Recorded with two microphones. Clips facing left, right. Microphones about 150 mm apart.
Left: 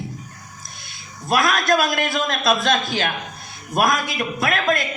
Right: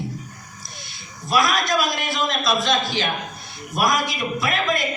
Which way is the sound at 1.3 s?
55° left (ahead or behind).